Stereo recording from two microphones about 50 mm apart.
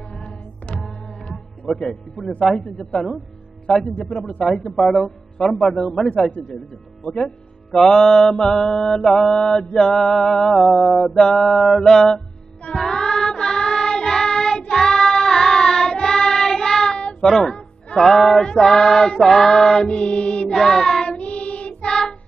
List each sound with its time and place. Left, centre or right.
0.7 s music: centre
3.7 s music: centre
4.0 s music: centre
4.7 s music: centre
7.2 s music: centre
9.0 s music: centre
12.7 s child singing: centre
17.2 s speech: centre
17.9 s music: centre
20.5 s child singing: centre
21.2 s child singing: left